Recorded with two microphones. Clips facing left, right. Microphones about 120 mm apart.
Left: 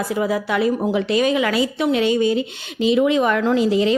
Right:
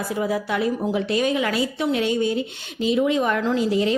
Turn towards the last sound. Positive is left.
turn(degrees=90)